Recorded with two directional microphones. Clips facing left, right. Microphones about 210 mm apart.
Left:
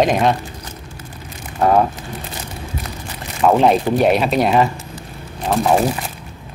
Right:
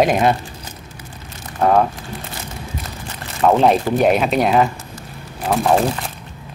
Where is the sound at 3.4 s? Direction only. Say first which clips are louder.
Even; centre (ahead or behind).